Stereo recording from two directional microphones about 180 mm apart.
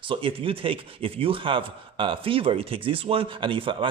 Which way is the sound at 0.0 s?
30° right (ahead or behind).